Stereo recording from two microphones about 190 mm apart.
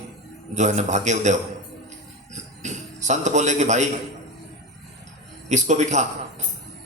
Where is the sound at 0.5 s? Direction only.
40° right (ahead or behind).